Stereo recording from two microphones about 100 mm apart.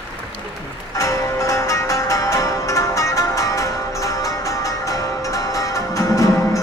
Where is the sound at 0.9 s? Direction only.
30° left (ahead or behind).